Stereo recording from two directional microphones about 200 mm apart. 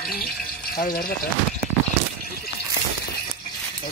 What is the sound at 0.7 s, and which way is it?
Speech, 45° left (ahead or behind).